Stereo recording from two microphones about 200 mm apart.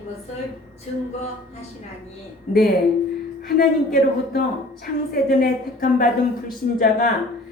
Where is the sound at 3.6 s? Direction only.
45° left (ahead or behind).